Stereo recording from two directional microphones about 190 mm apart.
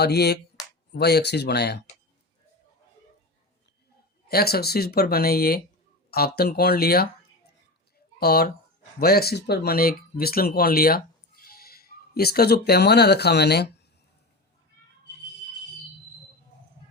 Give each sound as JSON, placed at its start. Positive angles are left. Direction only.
{"t": 0.0, "sound": "speech", "side_deg": 60}
{"t": 4.3, "sound": "speech", "side_deg": 55}
{"t": 8.2, "sound": "speech", "side_deg": 55}